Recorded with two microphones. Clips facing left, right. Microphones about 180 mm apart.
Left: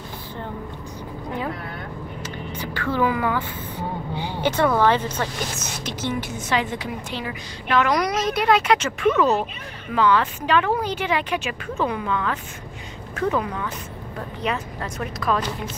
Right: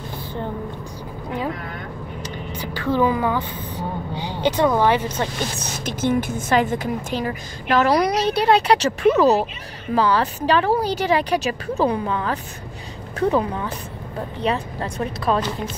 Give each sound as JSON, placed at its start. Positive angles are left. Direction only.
{"t": 2.6, "sound": "speech", "side_deg": -15}
{"t": 5.9, "sound": "a woman's voice", "side_deg": -50}